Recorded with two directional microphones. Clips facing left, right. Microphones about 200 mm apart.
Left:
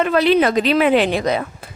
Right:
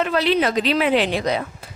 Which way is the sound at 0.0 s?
50° left (ahead or behind).